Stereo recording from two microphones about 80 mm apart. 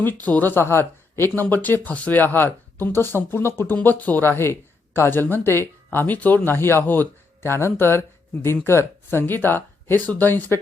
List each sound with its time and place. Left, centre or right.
0.0 s speech: left